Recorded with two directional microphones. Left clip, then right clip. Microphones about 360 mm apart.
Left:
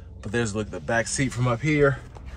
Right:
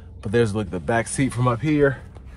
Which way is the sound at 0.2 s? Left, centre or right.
Centre.